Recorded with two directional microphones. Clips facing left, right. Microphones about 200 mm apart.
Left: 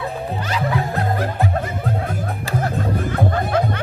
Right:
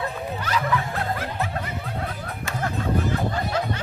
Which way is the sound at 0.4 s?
30° left (ahead or behind).